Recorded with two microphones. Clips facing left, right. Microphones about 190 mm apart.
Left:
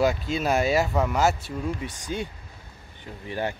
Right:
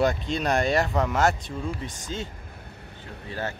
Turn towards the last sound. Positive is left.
turn(degrees=15)  # may be behind; listen again after turning